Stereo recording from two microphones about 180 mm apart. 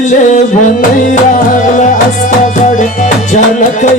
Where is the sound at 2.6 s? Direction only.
45° left (ahead or behind).